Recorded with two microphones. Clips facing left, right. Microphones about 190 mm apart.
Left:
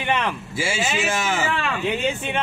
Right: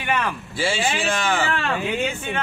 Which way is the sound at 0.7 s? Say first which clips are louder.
Right 2 dB; 5° left (ahead or behind).